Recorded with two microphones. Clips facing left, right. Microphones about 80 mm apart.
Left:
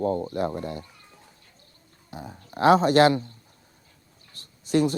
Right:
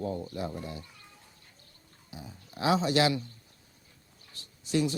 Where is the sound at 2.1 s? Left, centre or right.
Left.